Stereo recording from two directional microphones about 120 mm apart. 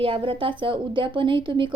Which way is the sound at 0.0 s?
45° right (ahead or behind).